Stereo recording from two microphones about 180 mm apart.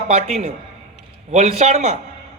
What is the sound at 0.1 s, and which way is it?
Speech, 35° right (ahead or behind).